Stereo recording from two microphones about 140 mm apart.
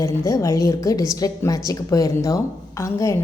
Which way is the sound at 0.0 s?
25° left (ahead or behind).